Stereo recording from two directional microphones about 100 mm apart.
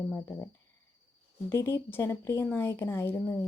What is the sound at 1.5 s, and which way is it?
Speech, 25° left (ahead or behind).